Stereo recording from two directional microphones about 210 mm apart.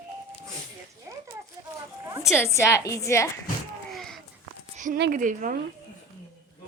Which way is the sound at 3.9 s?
Centre (ahead or behind).